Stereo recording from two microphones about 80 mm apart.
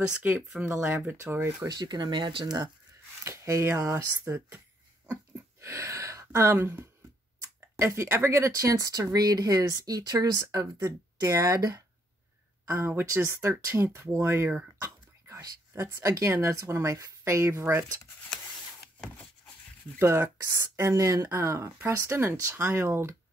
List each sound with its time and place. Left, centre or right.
0.1 s speech: right
1.7 s speech: right
3.3 s speech: right
4.2 s speech: right
5.6 s speech: right
12.6 s speech: right
20.0 s speech: right